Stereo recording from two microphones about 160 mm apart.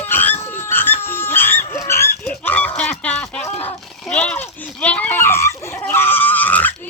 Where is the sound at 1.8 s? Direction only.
15° left (ahead or behind).